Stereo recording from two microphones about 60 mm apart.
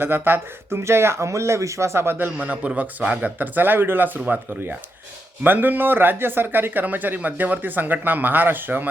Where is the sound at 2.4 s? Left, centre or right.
Right.